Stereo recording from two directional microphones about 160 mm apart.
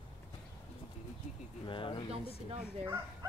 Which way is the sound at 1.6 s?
30° left (ahead or behind).